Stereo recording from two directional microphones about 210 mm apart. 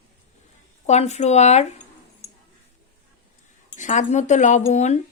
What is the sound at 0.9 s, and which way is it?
Speech, 30° left (ahead or behind).